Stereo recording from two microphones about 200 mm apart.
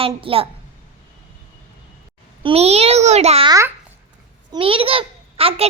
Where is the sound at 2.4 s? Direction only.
30° right (ahead or behind).